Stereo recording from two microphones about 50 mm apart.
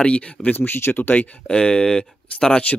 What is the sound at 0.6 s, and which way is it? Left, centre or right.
Speech, left.